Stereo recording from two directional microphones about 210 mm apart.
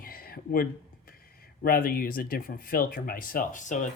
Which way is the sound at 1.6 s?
45° left (ahead or behind).